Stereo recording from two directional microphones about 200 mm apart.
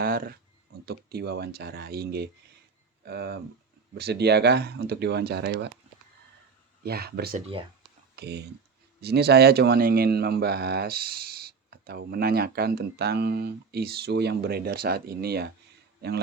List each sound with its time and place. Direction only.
0.0 s a sound: 45° right (ahead or behind)
0.9 s speech: 50° right (ahead or behind)
6.8 s speech: 50° right (ahead or behind)